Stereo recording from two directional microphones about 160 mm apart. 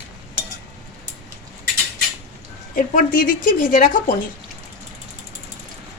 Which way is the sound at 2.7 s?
60° left (ahead or behind).